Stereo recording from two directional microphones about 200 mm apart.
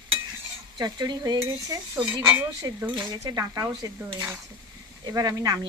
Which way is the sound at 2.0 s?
5° right (ahead or behind).